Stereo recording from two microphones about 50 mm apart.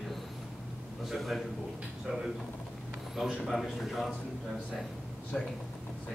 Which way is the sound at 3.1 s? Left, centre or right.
Centre.